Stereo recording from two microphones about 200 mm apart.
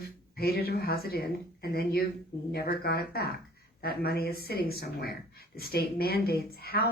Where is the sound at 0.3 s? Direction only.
50° left (ahead or behind).